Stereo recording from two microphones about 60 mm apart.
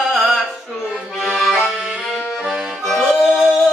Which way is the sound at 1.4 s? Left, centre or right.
Centre.